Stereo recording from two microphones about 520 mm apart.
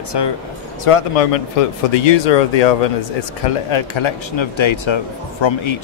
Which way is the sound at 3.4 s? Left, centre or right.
Left.